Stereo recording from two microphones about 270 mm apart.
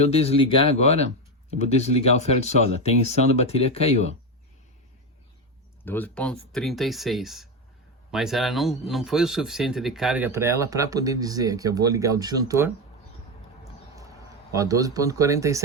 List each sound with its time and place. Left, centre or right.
0.0 s speech: left
5.8 s speech: centre
14.5 s speech: centre